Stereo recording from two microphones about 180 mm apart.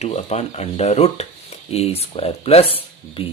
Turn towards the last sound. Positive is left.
turn(degrees=30)  # may be behind; listen again after turning